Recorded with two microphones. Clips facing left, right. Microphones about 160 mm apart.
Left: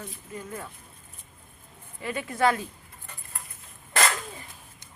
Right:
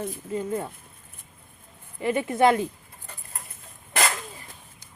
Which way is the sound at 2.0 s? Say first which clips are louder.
Right 5 dB; 20° right (ahead or behind).